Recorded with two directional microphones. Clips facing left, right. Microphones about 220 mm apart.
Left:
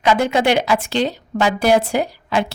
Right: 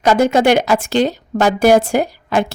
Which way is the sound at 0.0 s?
45° right (ahead or behind).